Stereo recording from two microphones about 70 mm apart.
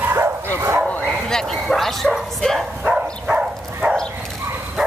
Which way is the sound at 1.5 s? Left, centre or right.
Centre.